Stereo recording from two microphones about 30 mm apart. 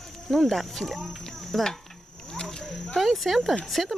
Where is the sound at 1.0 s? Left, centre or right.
Centre.